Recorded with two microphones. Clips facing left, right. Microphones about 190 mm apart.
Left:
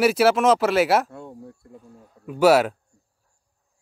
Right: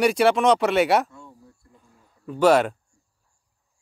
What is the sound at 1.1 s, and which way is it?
Speech, 60° left (ahead or behind).